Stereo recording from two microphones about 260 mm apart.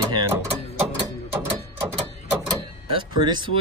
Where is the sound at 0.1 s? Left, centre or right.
Centre.